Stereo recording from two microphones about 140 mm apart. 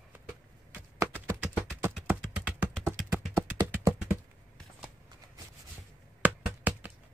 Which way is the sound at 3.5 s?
25° right (ahead or behind).